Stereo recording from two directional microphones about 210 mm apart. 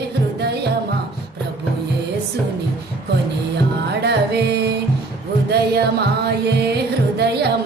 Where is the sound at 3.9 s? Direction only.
50° right (ahead or behind).